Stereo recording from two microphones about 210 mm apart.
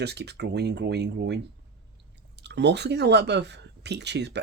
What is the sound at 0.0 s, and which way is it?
Speech, 50° right (ahead or behind).